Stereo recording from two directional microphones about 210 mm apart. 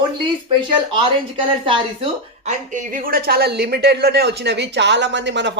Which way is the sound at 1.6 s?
25° right (ahead or behind).